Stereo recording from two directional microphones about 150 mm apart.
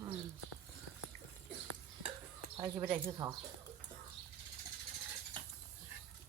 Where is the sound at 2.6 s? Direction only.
25° right (ahead or behind).